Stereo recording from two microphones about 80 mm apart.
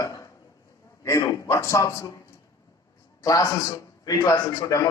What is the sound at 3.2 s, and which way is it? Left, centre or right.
A man's voice, left.